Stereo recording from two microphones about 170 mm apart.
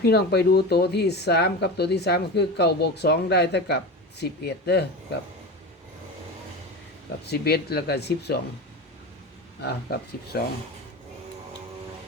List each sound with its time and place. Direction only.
0.0 s speech: 70° left (ahead or behind)
7.3 s speech: 65° left (ahead or behind)
9.6 s speech: 70° left (ahead or behind)